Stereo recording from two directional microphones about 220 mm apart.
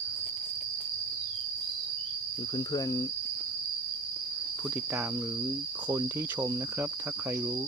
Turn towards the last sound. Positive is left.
turn(degrees=-10)  # may be behind; listen again after turning